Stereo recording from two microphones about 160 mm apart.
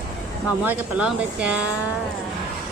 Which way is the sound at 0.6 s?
10° right (ahead or behind).